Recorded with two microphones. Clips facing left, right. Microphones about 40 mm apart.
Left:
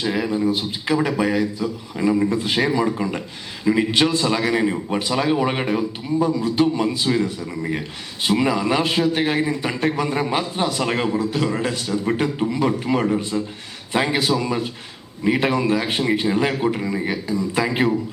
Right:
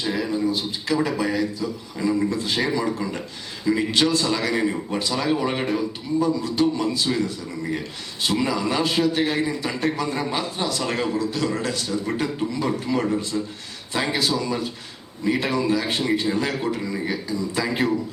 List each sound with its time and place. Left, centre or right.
0.0 s a man's voice: centre